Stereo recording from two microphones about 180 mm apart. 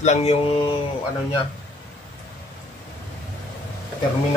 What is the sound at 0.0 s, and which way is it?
Speech, 35° left (ahead or behind).